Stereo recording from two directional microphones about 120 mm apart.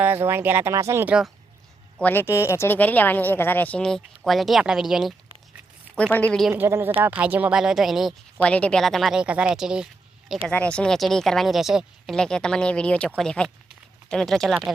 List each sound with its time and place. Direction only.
0.0 s speech: 15° right (ahead or behind)
1.0 s speech: 5° right (ahead or behind)
2.0 s speech: 15° left (ahead or behind); by 5.1 s 5° right (ahead or behind)
6.0 s speech: 10° left (ahead or behind)
6.5 s speech: 20° right (ahead or behind); by 8.1 s centre (ahead or behind)
8.4 s speech: 10° left (ahead or behind)
9.2 s speech: 10° right (ahead or behind)
10.5 s speech: 10° left (ahead or behind)